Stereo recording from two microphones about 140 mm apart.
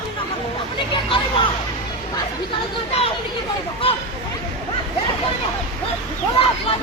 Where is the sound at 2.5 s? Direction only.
45° left (ahead or behind).